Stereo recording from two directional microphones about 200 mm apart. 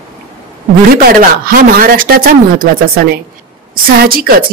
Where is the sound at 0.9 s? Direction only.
45° right (ahead or behind).